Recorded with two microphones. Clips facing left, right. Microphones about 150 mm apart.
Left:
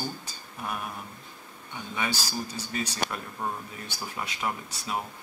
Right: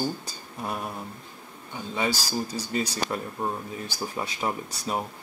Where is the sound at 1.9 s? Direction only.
30° right (ahead or behind).